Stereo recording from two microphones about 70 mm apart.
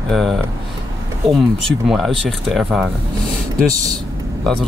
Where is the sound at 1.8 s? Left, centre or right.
Centre.